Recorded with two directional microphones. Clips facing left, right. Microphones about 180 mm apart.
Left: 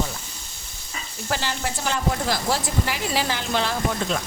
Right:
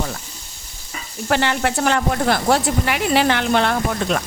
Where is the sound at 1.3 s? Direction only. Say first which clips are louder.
Right 8 dB; 65° right (ahead or behind).